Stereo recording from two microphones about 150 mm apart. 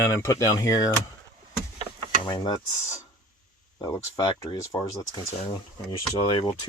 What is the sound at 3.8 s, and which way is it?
Speech, 20° left (ahead or behind).